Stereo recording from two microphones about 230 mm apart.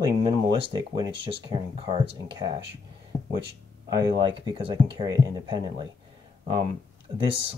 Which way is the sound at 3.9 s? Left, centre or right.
Centre.